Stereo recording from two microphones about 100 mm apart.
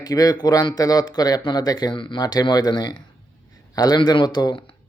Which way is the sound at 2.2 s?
40° left (ahead or behind).